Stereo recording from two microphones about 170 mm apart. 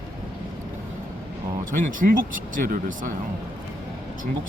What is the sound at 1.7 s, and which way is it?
Speech, 55° right (ahead or behind).